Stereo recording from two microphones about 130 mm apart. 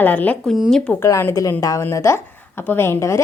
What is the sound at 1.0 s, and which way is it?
A woman's voice, 20° left (ahead or behind).